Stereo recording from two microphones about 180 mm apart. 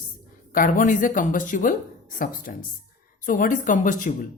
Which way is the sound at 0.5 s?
50° left (ahead or behind).